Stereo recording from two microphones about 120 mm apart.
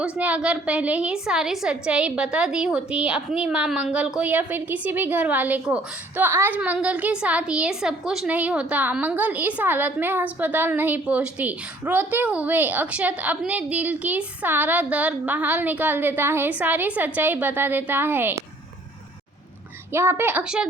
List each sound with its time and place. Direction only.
0.0 s a woman's voice: 10° right (ahead or behind)
19.9 s a woman's voice: 20° right (ahead or behind)